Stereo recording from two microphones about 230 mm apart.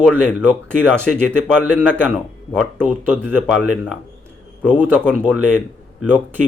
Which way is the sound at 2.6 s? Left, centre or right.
Centre.